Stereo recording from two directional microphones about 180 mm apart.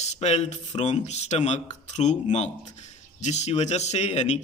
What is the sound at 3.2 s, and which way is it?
Speech, 40° left (ahead or behind).